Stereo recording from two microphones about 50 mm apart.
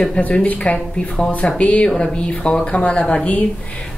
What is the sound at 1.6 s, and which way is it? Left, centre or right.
A woman's voice, left.